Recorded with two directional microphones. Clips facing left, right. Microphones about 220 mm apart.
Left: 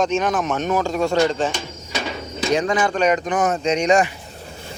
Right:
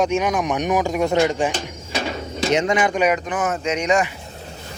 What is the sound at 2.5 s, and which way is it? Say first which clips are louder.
Speech: even; 25° right (ahead or behind).